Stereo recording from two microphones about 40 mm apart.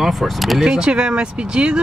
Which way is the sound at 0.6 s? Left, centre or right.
Centre.